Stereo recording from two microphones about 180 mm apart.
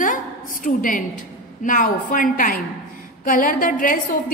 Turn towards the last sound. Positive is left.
turn(degrees=45)  # may be behind; listen again after turning